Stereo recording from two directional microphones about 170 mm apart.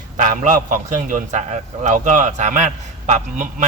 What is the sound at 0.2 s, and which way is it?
A man's voice, 50° right (ahead or behind).